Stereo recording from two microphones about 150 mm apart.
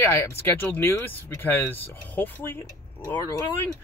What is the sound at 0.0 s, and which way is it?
Speech, 15° left (ahead or behind).